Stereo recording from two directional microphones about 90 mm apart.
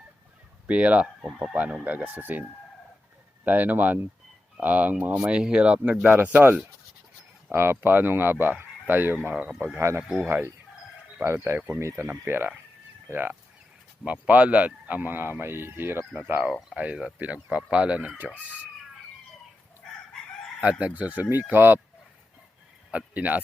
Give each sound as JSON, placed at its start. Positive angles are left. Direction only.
{"t": 0.7, "sound": "speech", "side_deg": -15}
{"t": 3.4, "sound": "speech", "side_deg": -20}
{"t": 10.2, "sound": "speech", "side_deg": -20}
{"t": 11.8, "sound": "speech", "side_deg": -30}
{"t": 16.5, "sound": "speech", "side_deg": -10}
{"t": 20.6, "sound": "speech", "side_deg": -15}
{"t": 22.9, "sound": "speech", "side_deg": -15}